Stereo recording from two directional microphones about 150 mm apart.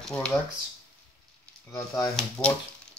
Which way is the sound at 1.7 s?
20° left (ahead or behind).